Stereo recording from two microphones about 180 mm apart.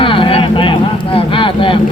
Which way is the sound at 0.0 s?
30° left (ahead or behind).